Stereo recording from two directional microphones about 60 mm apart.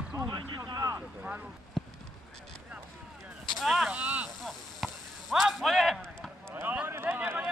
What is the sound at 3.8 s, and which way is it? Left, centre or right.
Speech, right.